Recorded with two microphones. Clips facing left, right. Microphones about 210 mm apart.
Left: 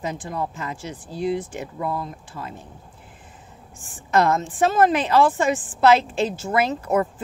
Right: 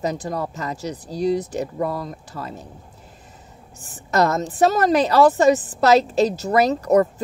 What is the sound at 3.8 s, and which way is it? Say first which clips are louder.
A woman's voice: right 1 dB; 40° right (ahead or behind).